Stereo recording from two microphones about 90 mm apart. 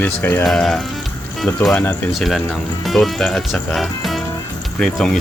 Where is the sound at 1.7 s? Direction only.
20° left (ahead or behind).